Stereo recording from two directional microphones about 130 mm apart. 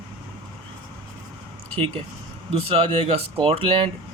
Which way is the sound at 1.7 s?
45° right (ahead or behind).